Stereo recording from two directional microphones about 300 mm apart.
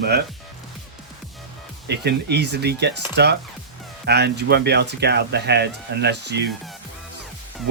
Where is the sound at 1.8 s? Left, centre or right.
Right.